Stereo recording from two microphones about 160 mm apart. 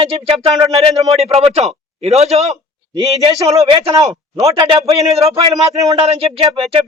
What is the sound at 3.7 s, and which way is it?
Speech, 25° right (ahead or behind).